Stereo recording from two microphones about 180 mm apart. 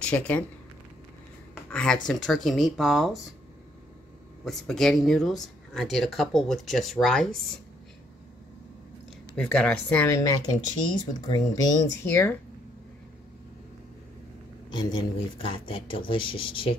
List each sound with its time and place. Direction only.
0.0 s speech: 5° left (ahead or behind)
1.7 s speech: 5° left (ahead or behind)
4.5 s speech: centre (ahead or behind)
9.3 s speech: 5° left (ahead or behind)
14.7 s speech: 25° left (ahead or behind)